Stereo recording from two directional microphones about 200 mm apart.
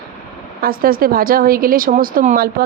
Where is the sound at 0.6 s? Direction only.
45° right (ahead or behind).